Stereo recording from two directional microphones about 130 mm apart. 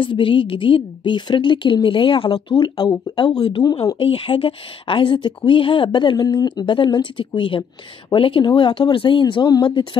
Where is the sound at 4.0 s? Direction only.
45° left (ahead or behind).